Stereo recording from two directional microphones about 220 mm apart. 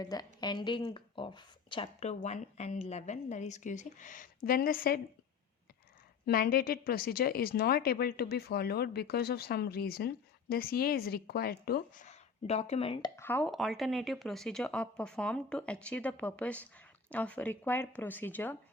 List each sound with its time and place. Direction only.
0.0 s speech: 15° left (ahead or behind); by 4.9 s 40° left (ahead or behind)
6.2 s speech: 40° left (ahead or behind)
12.0 s speech: 30° left (ahead or behind)
13.1 s speech: 10° left (ahead or behind)